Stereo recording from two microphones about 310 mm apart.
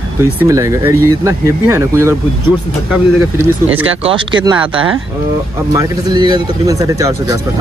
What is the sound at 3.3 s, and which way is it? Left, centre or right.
Speech, centre.